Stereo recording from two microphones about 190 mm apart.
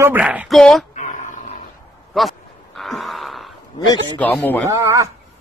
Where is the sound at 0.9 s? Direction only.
40° left (ahead or behind).